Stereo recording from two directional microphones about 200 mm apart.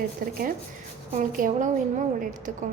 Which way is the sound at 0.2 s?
45° right (ahead or behind).